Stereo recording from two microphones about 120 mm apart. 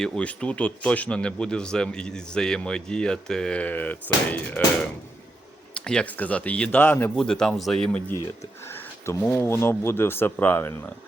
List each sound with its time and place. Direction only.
0.0 s speech: 10° left (ahead or behind)
8.7 s speech: 20° left (ahead or behind)